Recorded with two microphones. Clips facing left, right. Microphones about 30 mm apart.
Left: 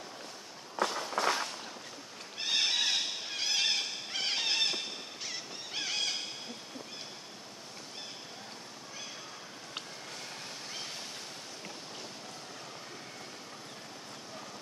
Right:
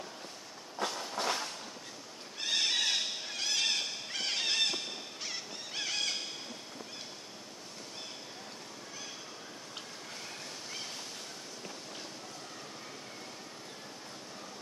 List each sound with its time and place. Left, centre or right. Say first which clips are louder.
0.7 s train: left 4 dB; left
2.4 s horse: left 1 dB; centre
5.7 s squeal: left 1 dB; centre